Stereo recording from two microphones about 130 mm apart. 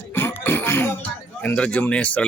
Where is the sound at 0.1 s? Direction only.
15° left (ahead or behind).